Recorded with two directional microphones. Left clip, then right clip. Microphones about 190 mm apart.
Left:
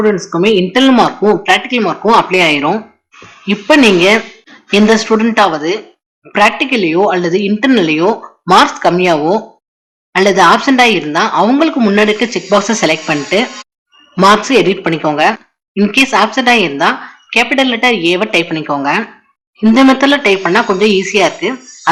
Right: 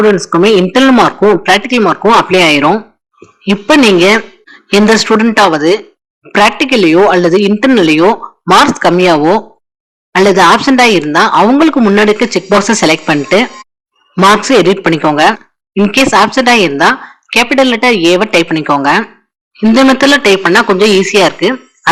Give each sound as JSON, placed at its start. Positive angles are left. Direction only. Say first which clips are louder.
{"t": 0.1, "sound": "speech", "louder": "right 4 dB", "side_deg": -30}
{"t": 11.5, "sound": "speech", "louder": "right 3 dB", "side_deg": -20}